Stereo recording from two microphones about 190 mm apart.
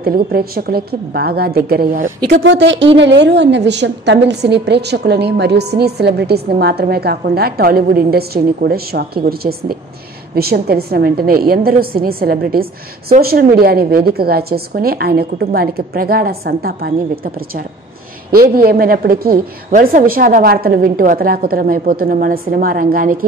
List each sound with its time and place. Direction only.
0.0 s a woman's voice: 50° right (ahead or behind)
2.2 s a woman's voice: 70° right (ahead or behind)
18.3 s a woman's voice: 50° right (ahead or behind)